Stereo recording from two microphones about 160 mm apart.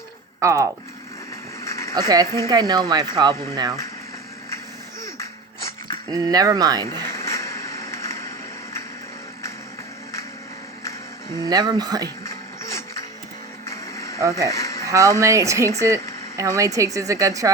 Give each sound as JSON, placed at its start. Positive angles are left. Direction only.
{"t": 0.3, "sound": "speech", "side_deg": -20}
{"t": 1.6, "sound": "a sound", "side_deg": 20}
{"t": 2.0, "sound": "a woman's voice", "side_deg": -25}
{"t": 2.2, "sound": "speech", "side_deg": 20}
{"t": 2.5, "sound": "a woman's voice", "side_deg": -25}
{"t": 5.1, "sound": "music", "side_deg": 20}
{"t": 6.1, "sound": "a woman's voice", "side_deg": -25}
{"t": 7.1, "sound": "a sound", "side_deg": 15}
{"t": 11.4, "sound": "a woman's voice", "side_deg": -25}
{"t": 13.7, "sound": "music", "side_deg": 20}
{"t": 14.2, "sound": "a woman's voice", "side_deg": -20}
{"t": 14.5, "sound": "a sound", "side_deg": 20}
{"t": 14.8, "sound": "a woman's voice", "side_deg": -20}